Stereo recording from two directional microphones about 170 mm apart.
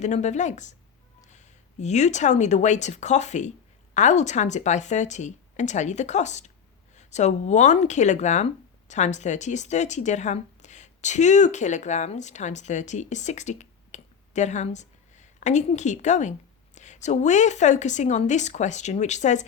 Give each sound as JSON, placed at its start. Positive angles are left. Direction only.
{"t": 0.0, "sound": "a woman's voice", "side_deg": 45}